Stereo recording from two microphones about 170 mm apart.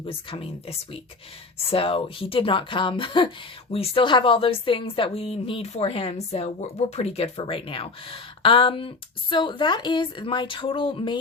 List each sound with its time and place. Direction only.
0.0 s a woman's voice: 30° left (ahead or behind)